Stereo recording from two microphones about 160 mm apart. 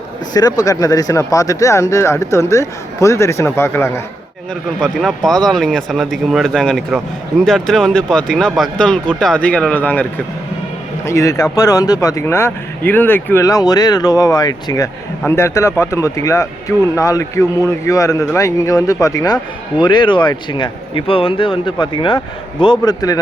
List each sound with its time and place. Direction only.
0.3 s speech: 25° left (ahead or behind)
4.8 s a man's voice: centre (ahead or behind); by 23.1 s 20° left (ahead or behind)